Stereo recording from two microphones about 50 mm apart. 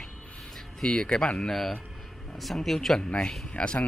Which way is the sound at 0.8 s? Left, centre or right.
Centre.